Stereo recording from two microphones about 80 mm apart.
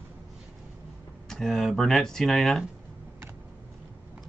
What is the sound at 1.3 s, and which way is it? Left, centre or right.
Speech, centre.